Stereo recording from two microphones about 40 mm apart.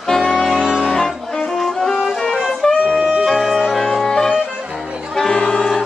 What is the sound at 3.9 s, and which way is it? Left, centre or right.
Music, centre.